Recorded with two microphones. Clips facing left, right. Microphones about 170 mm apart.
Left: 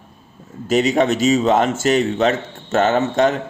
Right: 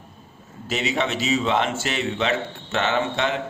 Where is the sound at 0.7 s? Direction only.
45° left (ahead or behind).